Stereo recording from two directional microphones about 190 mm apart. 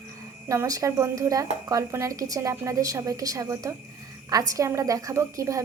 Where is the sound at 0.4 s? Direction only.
15° right (ahead or behind).